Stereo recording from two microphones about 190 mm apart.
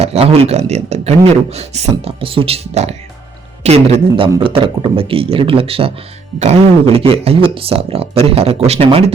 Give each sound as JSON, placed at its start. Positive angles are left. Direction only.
{"t": 0.0, "sound": "a man's voice", "side_deg": -35}